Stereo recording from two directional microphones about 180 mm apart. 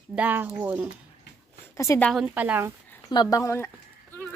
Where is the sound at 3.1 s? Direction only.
20° left (ahead or behind).